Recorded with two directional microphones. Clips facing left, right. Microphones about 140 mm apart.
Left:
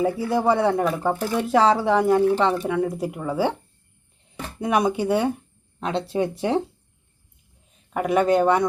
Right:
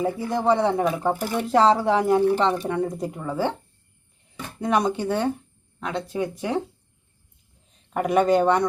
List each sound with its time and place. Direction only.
0.0 s speech: centre (ahead or behind)
4.6 s speech: 10° left (ahead or behind)
5.8 s speech: 25° left (ahead or behind)
7.9 s speech: centre (ahead or behind)